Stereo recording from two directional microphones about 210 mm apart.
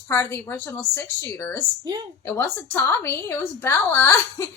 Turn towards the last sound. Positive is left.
turn(degrees=10)  # may be behind; listen again after turning